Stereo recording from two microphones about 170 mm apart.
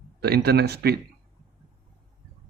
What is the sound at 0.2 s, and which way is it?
Speech, 70° right (ahead or behind).